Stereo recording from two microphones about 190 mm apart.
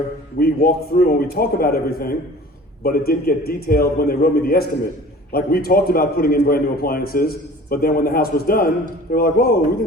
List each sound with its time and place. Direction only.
0.3 s a man's voice: 55° left (ahead or behind)